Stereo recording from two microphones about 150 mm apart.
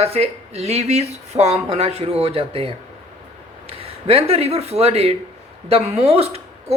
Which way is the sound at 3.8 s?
40° right (ahead or behind).